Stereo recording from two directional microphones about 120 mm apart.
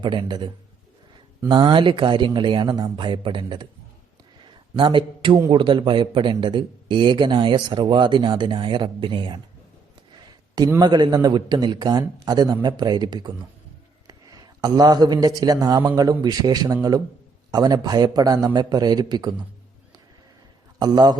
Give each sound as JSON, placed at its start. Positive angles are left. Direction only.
{"t": 0.0, "sound": "a man's voice", "side_deg": -40}
{"t": 4.8, "sound": "a man's voice", "side_deg": -45}
{"t": 10.8, "sound": "a man's voice", "side_deg": -35}
{"t": 20.7, "sound": "a man's voice", "side_deg": -35}